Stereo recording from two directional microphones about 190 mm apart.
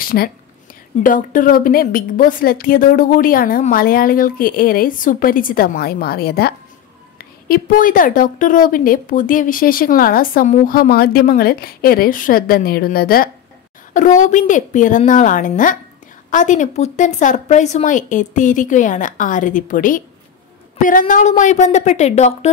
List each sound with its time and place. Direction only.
0.0 s a woman's voice: 50° left (ahead or behind); by 22.5 s 35° left (ahead or behind)